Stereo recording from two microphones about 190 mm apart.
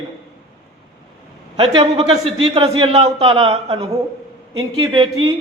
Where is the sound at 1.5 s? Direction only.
30° right (ahead or behind).